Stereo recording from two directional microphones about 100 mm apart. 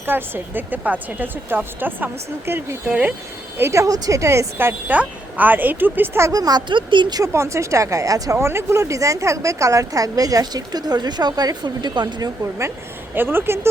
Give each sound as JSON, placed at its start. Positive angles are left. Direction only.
{"t": 0.0, "sound": "a woman's voice", "side_deg": -20}
{"t": 3.6, "sound": "a woman's voice", "side_deg": -30}
{"t": 7.2, "sound": "speech", "side_deg": -30}
{"t": 13.1, "sound": "a woman's voice", "side_deg": -20}